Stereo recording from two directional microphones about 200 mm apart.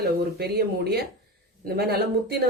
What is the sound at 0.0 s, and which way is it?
Speech, 50° right (ahead or behind).